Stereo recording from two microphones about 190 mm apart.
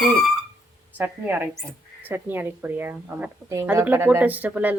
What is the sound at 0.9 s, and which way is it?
A woman's voice, 10° right (ahead or behind).